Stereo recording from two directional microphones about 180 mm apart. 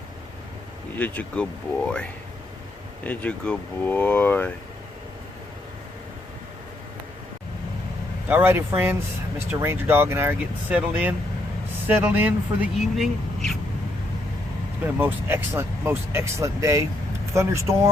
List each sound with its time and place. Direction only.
0.9 s speech: 10° left (ahead or behind)
3.0 s speech: 10° left (ahead or behind)
8.3 s speech: 10° right (ahead or behind)
14.8 s speech: 10° right (ahead or behind)